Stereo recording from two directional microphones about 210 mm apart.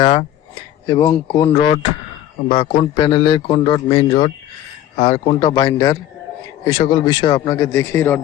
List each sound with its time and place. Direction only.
0.0 s a man's voice: 25° left (ahead or behind)
0.9 s a man's voice: 15° left (ahead or behind)